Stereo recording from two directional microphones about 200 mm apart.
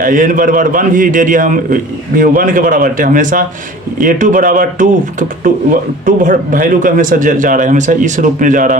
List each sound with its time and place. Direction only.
0.0 s a man's voice: 40° right (ahead or behind)
6.1 s a man's voice: 40° right (ahead or behind)